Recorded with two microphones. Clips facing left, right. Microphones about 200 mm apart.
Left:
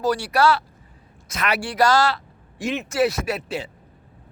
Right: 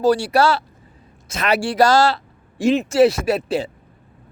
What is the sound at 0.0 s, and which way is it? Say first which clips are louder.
A man's voice: right 4 dB; 30° right (ahead or behind).